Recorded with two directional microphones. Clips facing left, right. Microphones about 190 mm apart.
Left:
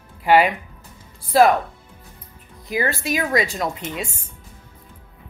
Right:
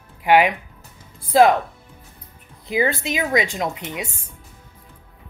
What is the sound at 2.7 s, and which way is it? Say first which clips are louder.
A woman's voice: right 2 dB; 20° right (ahead or behind).